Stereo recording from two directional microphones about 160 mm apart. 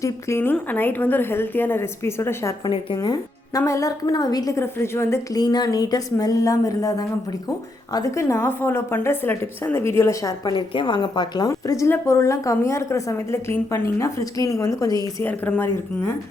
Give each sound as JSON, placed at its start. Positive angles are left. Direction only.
{"t": 0.0, "sound": "a woman's voice", "side_deg": 15}
{"t": 2.6, "sound": "a woman's voice", "side_deg": 25}
{"t": 15.2, "sound": "a woman's voice", "side_deg": 10}